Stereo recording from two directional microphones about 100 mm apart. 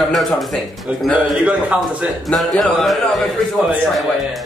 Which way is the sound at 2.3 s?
5° left (ahead or behind).